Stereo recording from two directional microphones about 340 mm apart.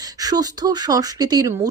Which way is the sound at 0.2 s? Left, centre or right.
Centre.